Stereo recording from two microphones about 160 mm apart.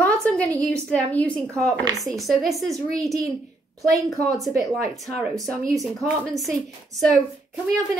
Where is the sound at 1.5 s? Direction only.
20° right (ahead or behind).